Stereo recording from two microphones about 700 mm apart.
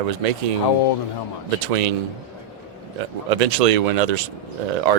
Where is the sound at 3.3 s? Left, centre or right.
Right.